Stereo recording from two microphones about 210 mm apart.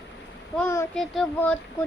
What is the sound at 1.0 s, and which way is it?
Child singing, 5° left (ahead or behind).